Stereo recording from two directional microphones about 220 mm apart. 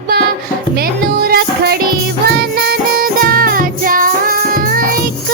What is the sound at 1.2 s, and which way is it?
Music, 45° right (ahead or behind).